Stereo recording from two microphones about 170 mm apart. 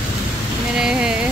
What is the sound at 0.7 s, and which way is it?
Speech, 5° right (ahead or behind).